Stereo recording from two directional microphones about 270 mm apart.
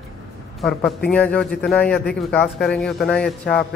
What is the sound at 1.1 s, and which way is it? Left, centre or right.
A man's voice, centre.